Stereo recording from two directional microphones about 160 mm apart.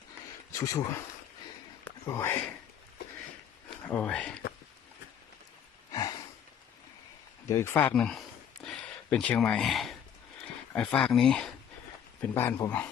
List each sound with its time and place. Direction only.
0.5 s speech: 20° left (ahead or behind)
2.0 s speech: 15° left (ahead or behind)
3.8 s speech: 10° left (ahead or behind)
5.9 s a sound: 25° left (ahead or behind)
7.4 s speech: 20° left (ahead or behind)
8.6 s a sound: 5° left (ahead or behind)
10.7 s speech: 5° left (ahead or behind)
12.2 s speech: 15° left (ahead or behind)